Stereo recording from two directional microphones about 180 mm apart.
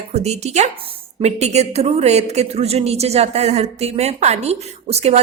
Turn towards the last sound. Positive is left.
turn(degrees=-35)  # may be behind; listen again after turning